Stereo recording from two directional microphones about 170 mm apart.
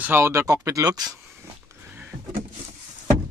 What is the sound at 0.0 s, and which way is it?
Speech, 15° right (ahead or behind).